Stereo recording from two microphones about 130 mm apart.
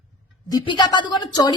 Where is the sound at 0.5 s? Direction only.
35° left (ahead or behind).